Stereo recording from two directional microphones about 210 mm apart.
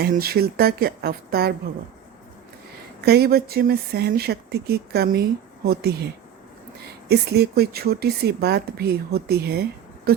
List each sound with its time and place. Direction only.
0.0 s speech: 45° right (ahead or behind)
3.0 s speech: 50° right (ahead or behind)
7.1 s speech: 50° right (ahead or behind)